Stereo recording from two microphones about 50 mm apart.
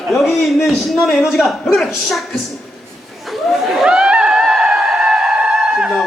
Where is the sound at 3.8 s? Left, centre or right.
Centre.